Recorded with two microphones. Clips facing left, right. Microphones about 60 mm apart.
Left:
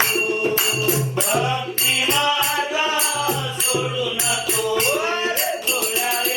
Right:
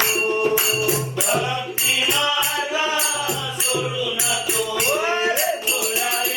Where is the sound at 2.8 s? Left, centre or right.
Left.